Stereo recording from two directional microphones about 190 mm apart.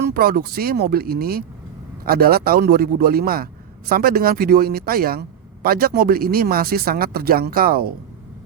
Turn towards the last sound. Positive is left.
turn(degrees=-50)  # may be behind; listen again after turning